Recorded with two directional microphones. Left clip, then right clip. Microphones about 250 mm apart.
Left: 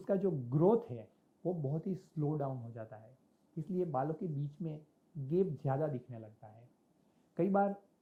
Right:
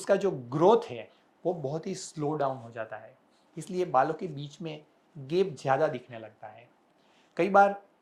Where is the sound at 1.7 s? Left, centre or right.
Centre.